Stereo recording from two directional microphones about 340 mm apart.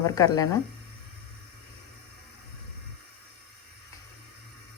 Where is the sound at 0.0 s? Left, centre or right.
Centre.